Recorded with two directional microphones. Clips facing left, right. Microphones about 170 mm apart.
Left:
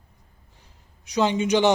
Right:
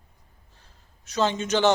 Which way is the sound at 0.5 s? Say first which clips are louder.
Left 2 dB; 15° left (ahead or behind).